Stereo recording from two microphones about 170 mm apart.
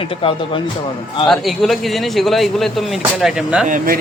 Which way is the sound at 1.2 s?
Centre (ahead or behind).